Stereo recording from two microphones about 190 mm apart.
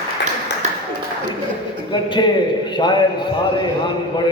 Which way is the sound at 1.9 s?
25° left (ahead or behind).